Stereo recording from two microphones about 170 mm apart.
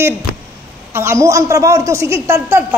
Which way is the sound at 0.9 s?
15° right (ahead or behind).